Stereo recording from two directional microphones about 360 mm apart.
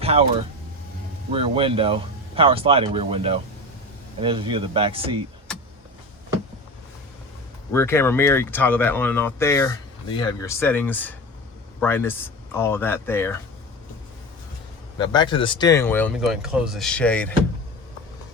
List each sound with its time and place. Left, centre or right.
0.0 s speech: centre
1.3 s speech: centre
7.7 s speech: centre
14.9 s speech: centre